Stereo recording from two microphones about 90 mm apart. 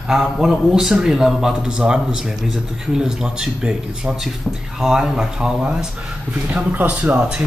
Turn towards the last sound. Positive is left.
turn(degrees=-15)  # may be behind; listen again after turning